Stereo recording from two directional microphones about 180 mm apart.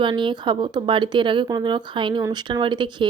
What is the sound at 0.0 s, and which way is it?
Speech, 25° right (ahead or behind).